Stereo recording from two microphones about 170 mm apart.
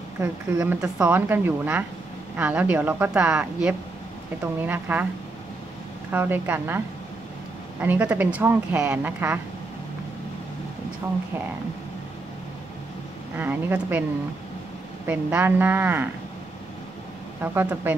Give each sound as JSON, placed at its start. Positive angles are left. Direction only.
{"t": 0.2, "sound": "speech", "side_deg": -10}
{"t": 6.1, "sound": "speech", "side_deg": -10}
{"t": 7.8, "sound": "speech", "side_deg": -10}
{"t": 13.4, "sound": "speech", "side_deg": -10}
{"t": 15.0, "sound": "speech", "side_deg": -10}
{"t": 17.4, "sound": "speech", "side_deg": -10}